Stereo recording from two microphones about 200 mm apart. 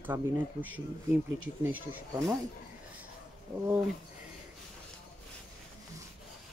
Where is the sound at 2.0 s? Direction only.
15° right (ahead or behind).